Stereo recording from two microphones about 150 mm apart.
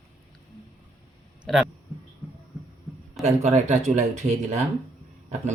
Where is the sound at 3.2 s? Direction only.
50° right (ahead or behind).